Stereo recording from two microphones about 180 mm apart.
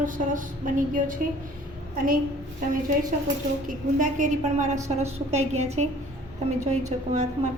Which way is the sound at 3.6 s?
45° right (ahead or behind).